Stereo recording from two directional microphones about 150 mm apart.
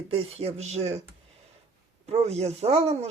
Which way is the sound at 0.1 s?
40° right (ahead or behind).